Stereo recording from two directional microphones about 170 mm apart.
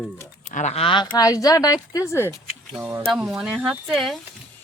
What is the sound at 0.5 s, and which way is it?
Speech, 40° left (ahead or behind).